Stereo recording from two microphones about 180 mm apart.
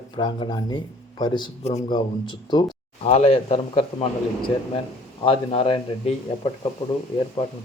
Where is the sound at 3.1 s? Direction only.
35° left (ahead or behind).